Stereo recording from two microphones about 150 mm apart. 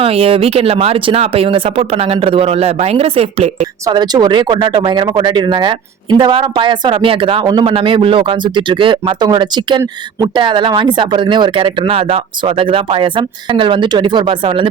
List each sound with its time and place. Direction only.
0.0 s speech: 40° right (ahead or behind)
3.8 s speech: 25° right (ahead or behind)